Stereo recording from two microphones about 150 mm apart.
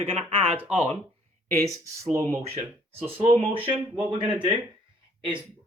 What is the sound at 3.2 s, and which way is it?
Speech, 40° right (ahead or behind).